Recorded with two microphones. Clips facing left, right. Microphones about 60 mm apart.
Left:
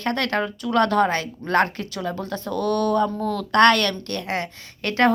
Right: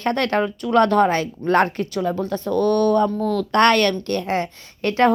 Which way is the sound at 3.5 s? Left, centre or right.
Centre.